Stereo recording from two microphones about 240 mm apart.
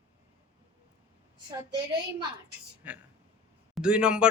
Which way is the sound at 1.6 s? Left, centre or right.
Centre.